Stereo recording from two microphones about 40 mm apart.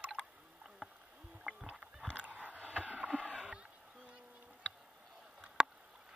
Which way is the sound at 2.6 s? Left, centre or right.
Left.